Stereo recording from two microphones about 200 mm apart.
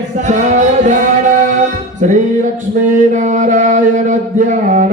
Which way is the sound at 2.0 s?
40° right (ahead or behind).